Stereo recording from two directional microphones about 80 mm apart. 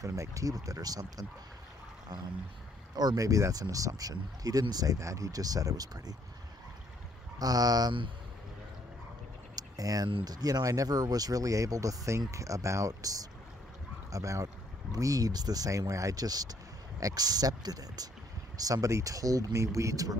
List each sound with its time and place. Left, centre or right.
0.0 s speech: right
3.0 s speech: right
7.3 s speech: right
9.6 s a sound: right
10.2 s speech: right